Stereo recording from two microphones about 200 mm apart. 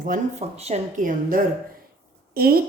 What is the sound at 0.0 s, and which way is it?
A woman's voice, 35° right (ahead or behind).